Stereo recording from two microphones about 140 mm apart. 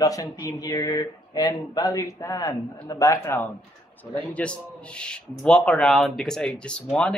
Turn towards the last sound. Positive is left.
turn(degrees=5)  # may be behind; listen again after turning